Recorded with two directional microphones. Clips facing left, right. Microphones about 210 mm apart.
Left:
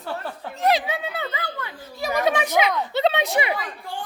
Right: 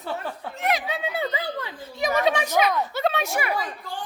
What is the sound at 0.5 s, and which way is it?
Speech, 35° left (ahead or behind).